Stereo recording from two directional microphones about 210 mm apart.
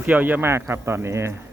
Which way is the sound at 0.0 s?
10° right (ahead or behind).